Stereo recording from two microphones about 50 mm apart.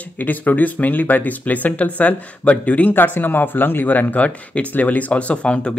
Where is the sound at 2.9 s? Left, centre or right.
Left.